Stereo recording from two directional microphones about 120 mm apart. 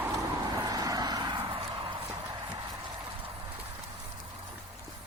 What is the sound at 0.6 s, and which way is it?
Vehicle, 30° right (ahead or behind).